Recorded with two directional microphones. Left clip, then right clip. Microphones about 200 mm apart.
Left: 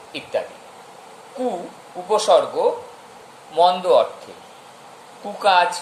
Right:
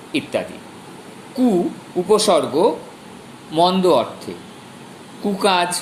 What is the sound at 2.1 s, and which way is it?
A man's voice, 30° right (ahead or behind).